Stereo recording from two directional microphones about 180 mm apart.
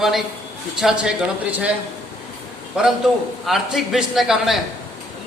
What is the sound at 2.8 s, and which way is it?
A man's voice, 5° right (ahead or behind).